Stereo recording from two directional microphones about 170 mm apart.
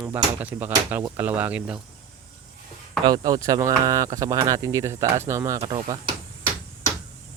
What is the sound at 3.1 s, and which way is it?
Speech, 20° right (ahead or behind).